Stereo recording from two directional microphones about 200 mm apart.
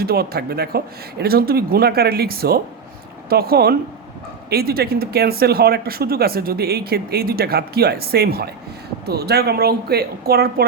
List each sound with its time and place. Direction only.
0.0 s speech: 50° right (ahead or behind)